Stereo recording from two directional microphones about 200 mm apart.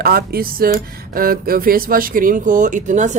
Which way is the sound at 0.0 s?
50° right (ahead or behind).